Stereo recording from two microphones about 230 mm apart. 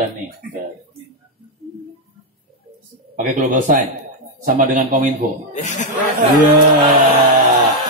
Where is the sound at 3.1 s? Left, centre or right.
Right.